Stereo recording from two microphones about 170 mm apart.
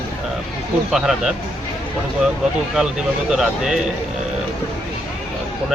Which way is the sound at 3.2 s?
5° right (ahead or behind).